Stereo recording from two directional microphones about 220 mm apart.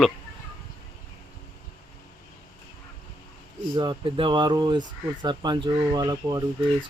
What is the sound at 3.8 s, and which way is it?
Speech, 20° right (ahead or behind).